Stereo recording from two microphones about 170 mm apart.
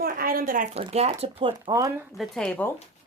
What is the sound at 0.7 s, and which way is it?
Speech, 35° right (ahead or behind).